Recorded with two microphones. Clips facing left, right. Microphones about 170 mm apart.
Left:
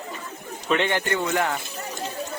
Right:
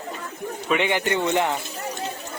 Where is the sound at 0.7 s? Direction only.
15° right (ahead or behind).